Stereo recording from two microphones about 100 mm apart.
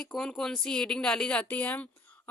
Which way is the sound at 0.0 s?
5° left (ahead or behind).